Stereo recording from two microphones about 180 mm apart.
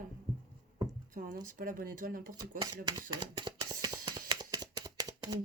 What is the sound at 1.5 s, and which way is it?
Speech, 50° right (ahead or behind).